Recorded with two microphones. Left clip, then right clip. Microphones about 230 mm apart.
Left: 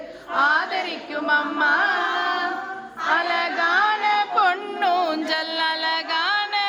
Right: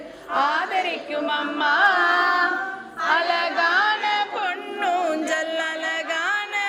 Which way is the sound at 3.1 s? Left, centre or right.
Centre.